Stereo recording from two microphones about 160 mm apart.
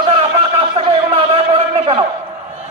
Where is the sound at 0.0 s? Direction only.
35° right (ahead or behind).